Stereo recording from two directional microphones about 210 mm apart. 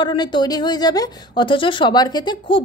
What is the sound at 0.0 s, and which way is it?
A woman's voice, 20° left (ahead or behind).